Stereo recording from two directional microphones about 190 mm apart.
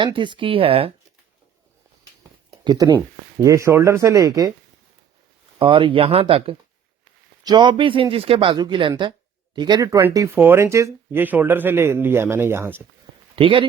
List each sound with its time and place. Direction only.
0.0 s speech: 25° right (ahead or behind)
2.6 s speech: 20° right (ahead or behind)
5.5 s speech: 25° right (ahead or behind)
13.3 s speech: 25° right (ahead or behind)